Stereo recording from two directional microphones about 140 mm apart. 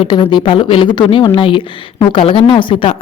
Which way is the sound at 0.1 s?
35° left (ahead or behind).